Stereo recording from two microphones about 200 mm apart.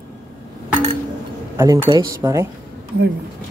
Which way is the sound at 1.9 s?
15° right (ahead or behind).